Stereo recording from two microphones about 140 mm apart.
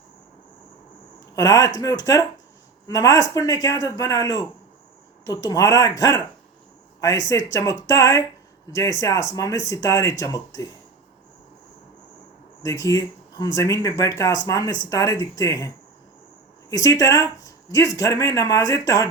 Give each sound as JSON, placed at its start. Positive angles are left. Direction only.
{"t": 1.4, "sound": "speech", "side_deg": 25}
{"t": 12.6, "sound": "speech", "side_deg": 25}